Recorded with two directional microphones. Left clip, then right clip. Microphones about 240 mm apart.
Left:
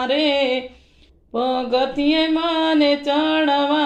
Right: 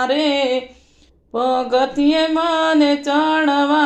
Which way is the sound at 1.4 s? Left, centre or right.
Right.